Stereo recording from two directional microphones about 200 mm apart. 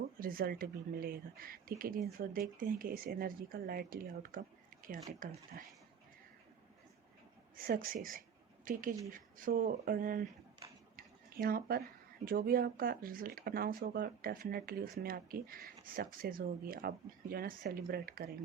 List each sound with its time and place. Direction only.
0.2 s speech: 45° right (ahead or behind)
7.5 s speech: 45° right (ahead or behind)
10.9 s a sound: 45° right (ahead or behind)
12.2 s speech: 45° right (ahead or behind)